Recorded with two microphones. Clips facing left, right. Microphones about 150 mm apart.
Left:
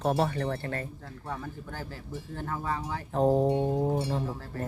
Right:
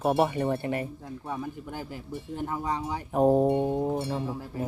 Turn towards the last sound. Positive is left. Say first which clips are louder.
# right 3 dB
turn(degrees=-15)  # may be behind; listen again after turning